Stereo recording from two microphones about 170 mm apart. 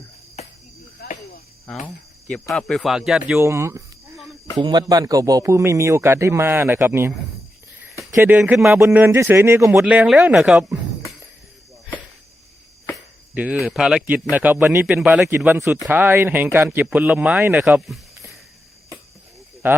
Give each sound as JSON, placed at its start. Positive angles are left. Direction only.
{"t": 0.4, "sound": "cricket", "side_deg": 40}
{"t": 1.7, "sound": "a man's voice", "side_deg": 5}
{"t": 8.1, "sound": "a man's voice", "side_deg": -10}
{"t": 13.3, "sound": "a man's voice", "side_deg": -5}
{"t": 19.6, "sound": "a man's voice", "side_deg": -10}